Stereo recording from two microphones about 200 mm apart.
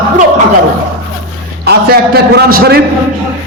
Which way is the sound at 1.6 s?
50° right (ahead or behind).